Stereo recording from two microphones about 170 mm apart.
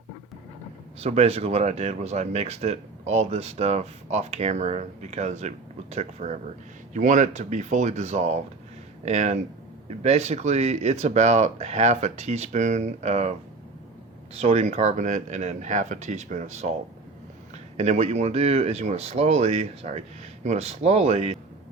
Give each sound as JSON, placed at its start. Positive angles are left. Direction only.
{"t": 0.9, "sound": "speech", "side_deg": -40}
{"t": 14.3, "sound": "speech", "side_deg": -40}
{"t": 17.7, "sound": "speech", "side_deg": -40}